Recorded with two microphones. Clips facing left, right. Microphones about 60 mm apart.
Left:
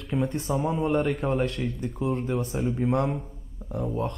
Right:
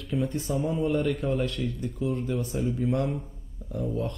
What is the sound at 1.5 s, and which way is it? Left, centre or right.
Speech, left.